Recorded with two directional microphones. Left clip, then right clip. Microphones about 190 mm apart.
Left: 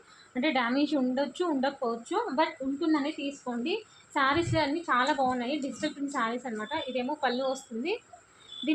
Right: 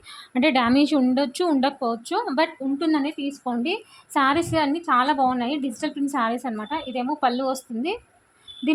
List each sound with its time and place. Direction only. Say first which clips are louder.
0.3 s a woman's voice: right 8 dB; 75° right (ahead or behind)